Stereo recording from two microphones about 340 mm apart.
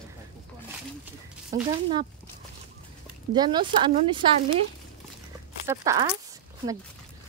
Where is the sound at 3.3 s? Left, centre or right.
Centre.